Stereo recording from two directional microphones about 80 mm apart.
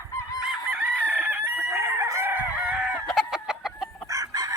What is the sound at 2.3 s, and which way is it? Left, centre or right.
Chicken, right.